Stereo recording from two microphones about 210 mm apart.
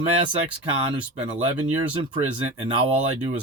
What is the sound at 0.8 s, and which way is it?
Speech, 30° right (ahead or behind).